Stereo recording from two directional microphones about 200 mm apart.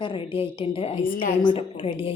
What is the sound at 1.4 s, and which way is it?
Speech, 25° left (ahead or behind).